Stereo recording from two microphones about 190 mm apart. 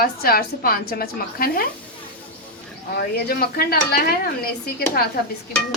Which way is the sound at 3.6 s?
50° left (ahead or behind).